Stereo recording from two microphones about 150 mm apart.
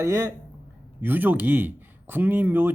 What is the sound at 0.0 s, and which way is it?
Speech, 15° right (ahead or behind).